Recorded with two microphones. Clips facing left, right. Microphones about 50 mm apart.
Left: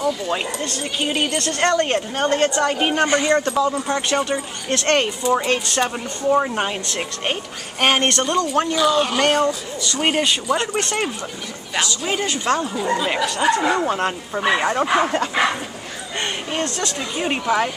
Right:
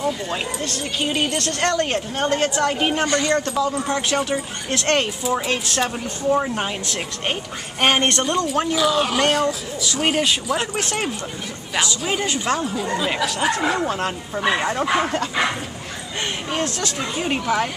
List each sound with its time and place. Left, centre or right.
0.3 s speech: centre
3.1 s speech: left
3.3 s speech: centre
8.0 s speech: centre
8.5 s speech: centre
16.5 s speech: centre